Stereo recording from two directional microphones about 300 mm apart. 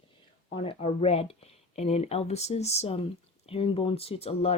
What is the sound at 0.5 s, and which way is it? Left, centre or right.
Speech, centre.